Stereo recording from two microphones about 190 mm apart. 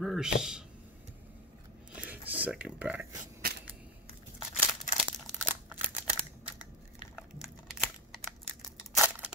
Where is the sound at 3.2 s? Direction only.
55° right (ahead or behind).